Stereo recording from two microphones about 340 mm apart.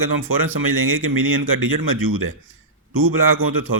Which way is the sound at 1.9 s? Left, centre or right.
Right.